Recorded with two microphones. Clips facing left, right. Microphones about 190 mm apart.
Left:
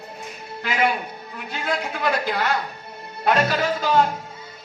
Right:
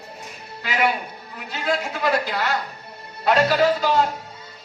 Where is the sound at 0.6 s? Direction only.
45° left (ahead or behind).